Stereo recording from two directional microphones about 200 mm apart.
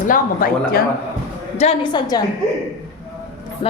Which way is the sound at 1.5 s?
25° left (ahead or behind).